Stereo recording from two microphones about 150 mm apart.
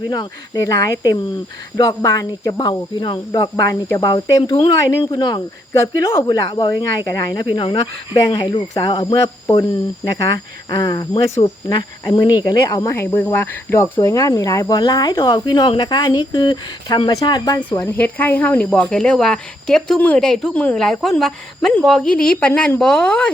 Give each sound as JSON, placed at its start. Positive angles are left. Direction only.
{"t": 0.1, "sound": "speech", "side_deg": 25}
{"t": 10.0, "sound": "speech", "side_deg": 20}
{"t": 17.7, "sound": "speech", "side_deg": 15}